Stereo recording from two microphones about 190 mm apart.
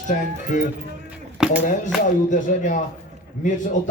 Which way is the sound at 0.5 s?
40° left (ahead or behind).